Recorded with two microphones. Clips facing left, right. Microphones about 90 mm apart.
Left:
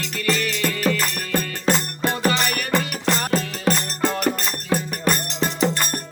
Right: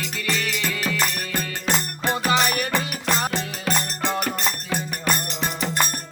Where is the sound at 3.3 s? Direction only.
40° left (ahead or behind).